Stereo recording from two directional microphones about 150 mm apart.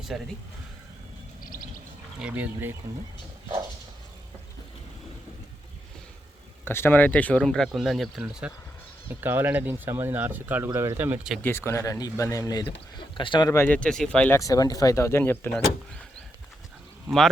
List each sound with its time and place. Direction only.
0.1 s speech: centre (ahead or behind)
2.1 s speech: 10° right (ahead or behind)
6.7 s speech: 15° left (ahead or behind); by 11.3 s 10° right (ahead or behind)
11.4 s speech: 15° left (ahead or behind); by 13.5 s 35° left (ahead or behind)
13.5 s speech: 10° left (ahead or behind)
14.3 s speech: 25° left (ahead or behind)